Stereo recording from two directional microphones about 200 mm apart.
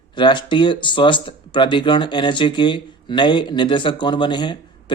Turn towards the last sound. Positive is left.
turn(degrees=25)  # may be behind; listen again after turning